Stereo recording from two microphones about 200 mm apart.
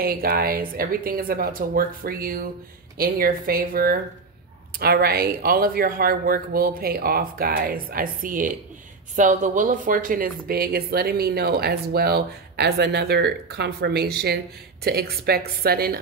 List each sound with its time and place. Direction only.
0.0 s a woman's voice: 45° right (ahead or behind)